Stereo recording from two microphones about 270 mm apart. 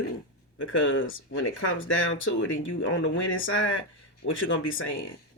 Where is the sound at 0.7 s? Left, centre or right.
Left.